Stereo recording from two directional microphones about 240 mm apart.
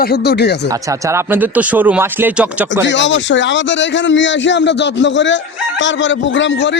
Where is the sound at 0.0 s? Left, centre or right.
Left.